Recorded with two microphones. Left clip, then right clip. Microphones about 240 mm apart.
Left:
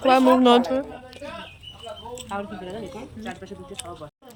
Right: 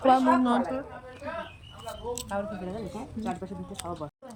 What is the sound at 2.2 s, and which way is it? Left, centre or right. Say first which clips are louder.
Speech: left 5 dB; right.